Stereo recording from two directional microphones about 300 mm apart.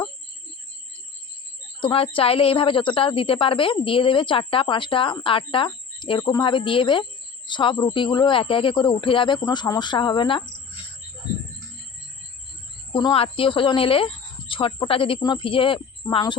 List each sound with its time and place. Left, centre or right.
1.8 s a woman's voice: centre
12.9 s a woman's voice: centre